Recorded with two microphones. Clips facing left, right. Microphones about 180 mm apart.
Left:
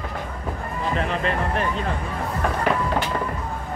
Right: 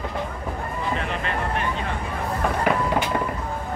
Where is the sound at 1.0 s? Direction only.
35° left (ahead or behind).